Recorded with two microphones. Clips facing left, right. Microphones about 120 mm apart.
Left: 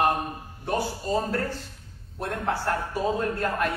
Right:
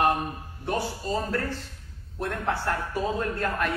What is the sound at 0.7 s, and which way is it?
A man's voice, 30° left (ahead or behind).